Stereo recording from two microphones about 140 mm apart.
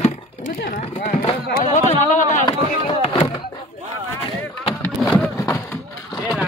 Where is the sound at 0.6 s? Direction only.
90° left.